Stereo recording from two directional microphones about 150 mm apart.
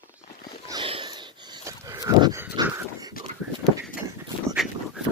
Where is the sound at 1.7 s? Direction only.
20° right (ahead or behind).